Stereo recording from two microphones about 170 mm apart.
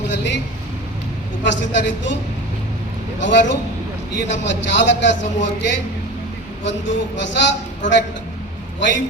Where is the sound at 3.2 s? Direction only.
90° left.